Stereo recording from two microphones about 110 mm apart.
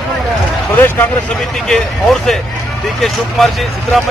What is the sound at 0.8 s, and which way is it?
Speech, 20° left (ahead or behind).